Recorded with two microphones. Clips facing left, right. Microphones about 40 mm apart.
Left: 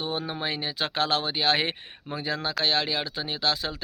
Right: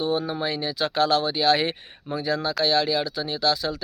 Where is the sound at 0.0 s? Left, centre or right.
Left.